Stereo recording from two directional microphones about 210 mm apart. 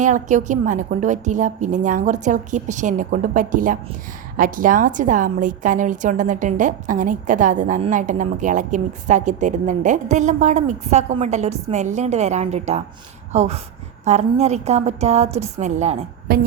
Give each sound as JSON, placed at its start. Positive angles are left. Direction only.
{"t": 0.0, "sound": "a woman's voice", "side_deg": -35}
{"t": 16.3, "sound": "speech", "side_deg": -45}